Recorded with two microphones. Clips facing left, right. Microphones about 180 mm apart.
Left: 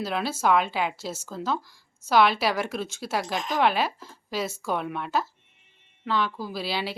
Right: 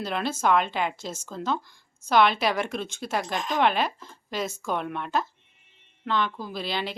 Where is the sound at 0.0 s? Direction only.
5° left (ahead or behind).